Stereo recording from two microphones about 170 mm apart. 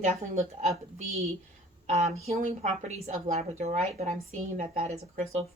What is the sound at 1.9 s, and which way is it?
A woman's voice, 40° right (ahead or behind).